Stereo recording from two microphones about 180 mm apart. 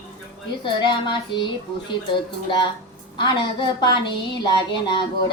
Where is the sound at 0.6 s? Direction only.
25° left (ahead or behind).